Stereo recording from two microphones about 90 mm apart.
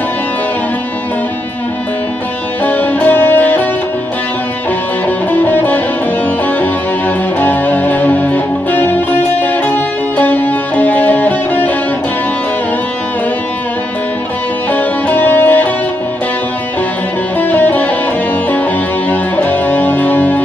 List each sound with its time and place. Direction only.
2.6 s music: 20° left (ahead or behind)
5.3 s music: 20° left (ahead or behind)
7.3 s music: 20° left (ahead or behind)
14.7 s music: 20° left (ahead or behind)
17.4 s music: 20° left (ahead or behind)
19.0 s music: 20° left (ahead or behind)